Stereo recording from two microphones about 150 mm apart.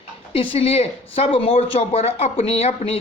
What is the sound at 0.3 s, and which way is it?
Speech, 40° left (ahead or behind).